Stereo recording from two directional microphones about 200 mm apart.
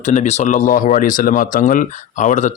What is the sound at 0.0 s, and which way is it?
Speech, 35° left (ahead or behind).